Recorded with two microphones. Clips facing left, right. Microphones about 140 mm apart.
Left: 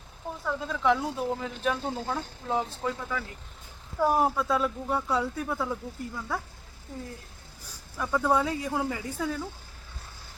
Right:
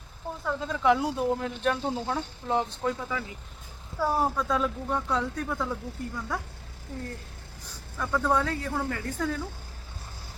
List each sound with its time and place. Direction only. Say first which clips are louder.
0.4 s speech: right 2 dB; centre (ahead or behind)
3.9 s speech: left 2 dB; 15° left (ahead or behind)
4.4 s speech: even; 5° left (ahead or behind)
7.6 s speech: even; 10° left (ahead or behind)